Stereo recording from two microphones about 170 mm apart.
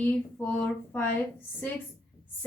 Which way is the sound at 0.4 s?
10° left (ahead or behind).